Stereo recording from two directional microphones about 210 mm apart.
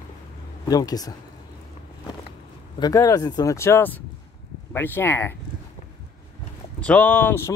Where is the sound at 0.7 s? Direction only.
15° left (ahead or behind).